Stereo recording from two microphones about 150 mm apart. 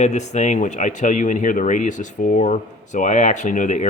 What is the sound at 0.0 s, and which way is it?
Speech, 50° left (ahead or behind).